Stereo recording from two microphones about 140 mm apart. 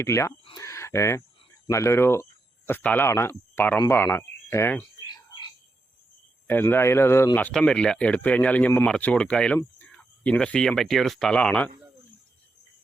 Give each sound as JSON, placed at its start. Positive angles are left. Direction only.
{"t": 0.0, "sound": "speech", "side_deg": 20}
{"t": 5.0, "sound": "cricket", "side_deg": 30}
{"t": 6.5, "sound": "speech", "side_deg": 15}